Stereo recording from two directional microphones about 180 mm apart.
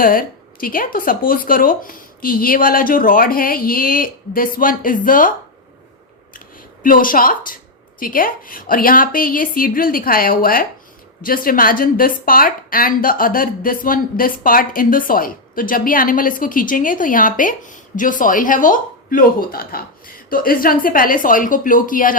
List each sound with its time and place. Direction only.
0.0 s a woman's voice: 50° left (ahead or behind)
6.8 s a woman's voice: 50° left (ahead or behind)